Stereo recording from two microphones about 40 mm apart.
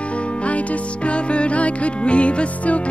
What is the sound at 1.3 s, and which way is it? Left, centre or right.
Music, left.